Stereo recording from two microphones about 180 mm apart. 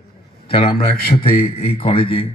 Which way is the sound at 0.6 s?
55° left (ahead or behind).